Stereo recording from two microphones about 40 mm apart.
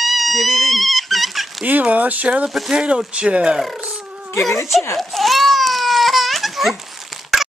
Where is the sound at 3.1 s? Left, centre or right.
Right.